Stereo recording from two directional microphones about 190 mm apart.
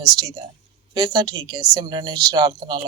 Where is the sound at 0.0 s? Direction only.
20° right (ahead or behind).